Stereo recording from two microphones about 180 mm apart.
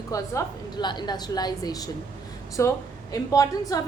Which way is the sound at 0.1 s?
20° left (ahead or behind).